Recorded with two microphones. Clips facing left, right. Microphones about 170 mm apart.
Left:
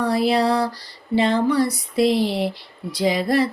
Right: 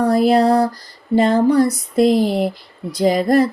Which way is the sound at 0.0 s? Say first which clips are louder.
Right 5 dB; 45° right (ahead or behind).